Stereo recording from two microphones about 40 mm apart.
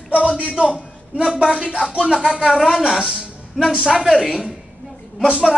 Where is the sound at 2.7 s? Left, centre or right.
Centre.